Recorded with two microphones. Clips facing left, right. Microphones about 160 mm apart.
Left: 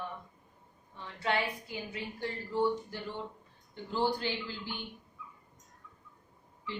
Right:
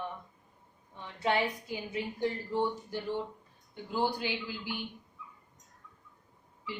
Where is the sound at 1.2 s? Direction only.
20° right (ahead or behind).